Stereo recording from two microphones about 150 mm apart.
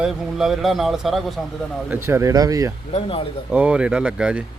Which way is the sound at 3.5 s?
10° right (ahead or behind).